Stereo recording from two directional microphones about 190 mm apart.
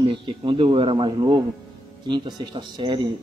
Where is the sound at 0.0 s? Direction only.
25° right (ahead or behind).